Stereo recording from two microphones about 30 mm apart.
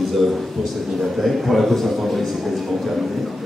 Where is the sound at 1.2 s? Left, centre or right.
Centre.